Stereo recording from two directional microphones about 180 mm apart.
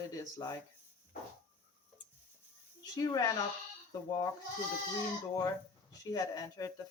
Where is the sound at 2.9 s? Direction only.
20° left (ahead or behind).